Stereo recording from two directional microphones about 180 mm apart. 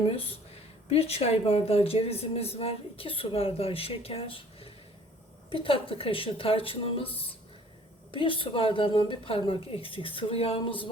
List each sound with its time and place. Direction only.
0.9 s a woman's voice: 35° left (ahead or behind)